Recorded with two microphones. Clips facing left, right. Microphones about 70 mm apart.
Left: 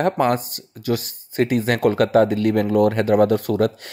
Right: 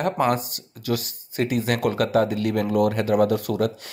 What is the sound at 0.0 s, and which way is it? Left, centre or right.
Speech, left.